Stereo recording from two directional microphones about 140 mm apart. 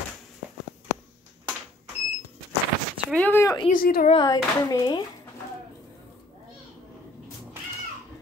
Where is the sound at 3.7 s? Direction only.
90° left.